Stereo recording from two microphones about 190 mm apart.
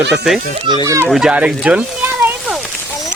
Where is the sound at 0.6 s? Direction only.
20° right (ahead or behind).